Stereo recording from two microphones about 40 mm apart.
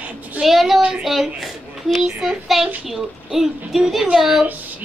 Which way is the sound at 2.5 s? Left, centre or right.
Centre.